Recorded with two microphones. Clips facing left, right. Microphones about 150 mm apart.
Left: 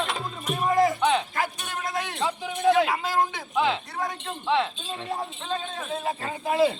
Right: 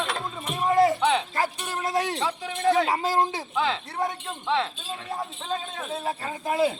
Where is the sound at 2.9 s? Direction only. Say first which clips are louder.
Right 2 dB; 40° right (ahead or behind).